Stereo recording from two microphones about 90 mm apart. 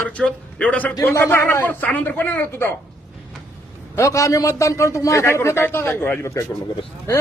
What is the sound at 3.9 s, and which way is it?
A man's voice, 35° left (ahead or behind).